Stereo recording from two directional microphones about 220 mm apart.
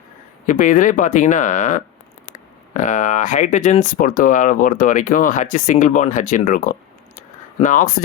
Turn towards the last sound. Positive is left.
turn(degrees=35)  # may be behind; listen again after turning